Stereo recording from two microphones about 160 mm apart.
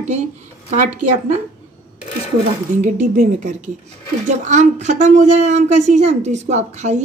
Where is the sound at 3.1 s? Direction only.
50° right (ahead or behind).